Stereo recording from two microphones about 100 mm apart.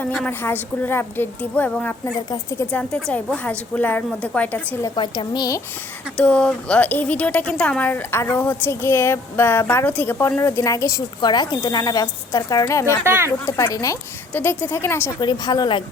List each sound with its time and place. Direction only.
0.3 s a woman's voice: 20° left (ahead or behind)
2.3 s speech: 30° left (ahead or behind)
2.7 s speech: 10° left (ahead or behind)
4.9 s speech: 45° left (ahead or behind)
6.1 s a woman's voice: 10° left (ahead or behind); by 11.0 s 30° left (ahead or behind)
11.2 s speech: 45° left (ahead or behind)
13.1 s speech: 25° right (ahead or behind)
13.4 s speech: 35° left (ahead or behind)
14.3 s a woman's voice: 20° left (ahead or behind)
15.2 s speech: 45° left (ahead or behind)